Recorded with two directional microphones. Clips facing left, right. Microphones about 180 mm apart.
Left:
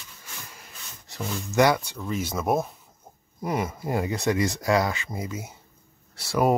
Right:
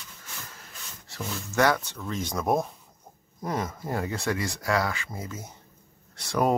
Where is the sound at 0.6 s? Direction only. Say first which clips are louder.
Even; 15° left (ahead or behind).